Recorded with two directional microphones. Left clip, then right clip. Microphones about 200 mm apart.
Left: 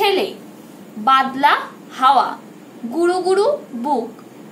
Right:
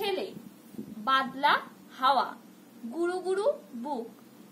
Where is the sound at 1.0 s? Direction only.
25° right (ahead or behind).